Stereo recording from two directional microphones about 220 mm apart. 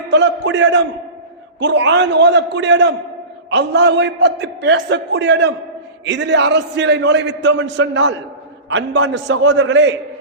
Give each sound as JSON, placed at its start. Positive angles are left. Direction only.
{"t": 0.1, "sound": "a man's voice", "side_deg": -50}